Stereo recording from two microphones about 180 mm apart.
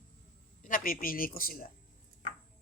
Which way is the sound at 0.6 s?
50° left (ahead or behind).